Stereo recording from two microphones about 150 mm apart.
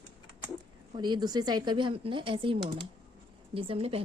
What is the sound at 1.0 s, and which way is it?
Speech, 30° right (ahead or behind).